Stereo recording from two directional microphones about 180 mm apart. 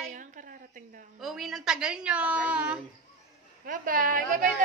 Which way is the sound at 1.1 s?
Centre (ahead or behind).